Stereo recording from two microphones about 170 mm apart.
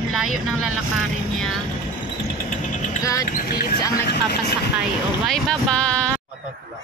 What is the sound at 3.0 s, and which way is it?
Speech, 20° left (ahead or behind).